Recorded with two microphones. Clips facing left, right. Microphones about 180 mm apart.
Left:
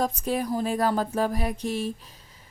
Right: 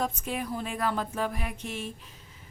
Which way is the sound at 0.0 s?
40° left (ahead or behind).